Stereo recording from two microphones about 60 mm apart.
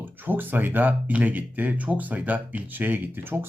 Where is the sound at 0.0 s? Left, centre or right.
Right.